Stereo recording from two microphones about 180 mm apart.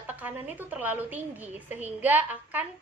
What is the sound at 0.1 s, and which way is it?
A woman's voice, 10° right (ahead or behind).